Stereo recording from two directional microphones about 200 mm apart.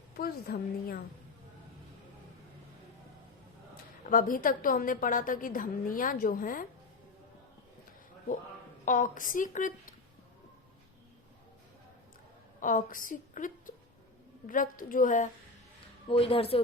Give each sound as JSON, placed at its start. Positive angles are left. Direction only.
{"t": 0.2, "sound": "a woman's voice", "side_deg": 50}
{"t": 4.0, "sound": "a woman's voice", "side_deg": 45}
{"t": 8.8, "sound": "speech", "side_deg": 40}
{"t": 12.6, "sound": "a woman's voice", "side_deg": 40}
{"t": 16.0, "sound": "a woman's voice", "side_deg": 25}